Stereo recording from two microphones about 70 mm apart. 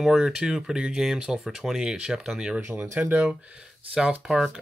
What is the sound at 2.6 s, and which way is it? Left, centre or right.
Speech, right.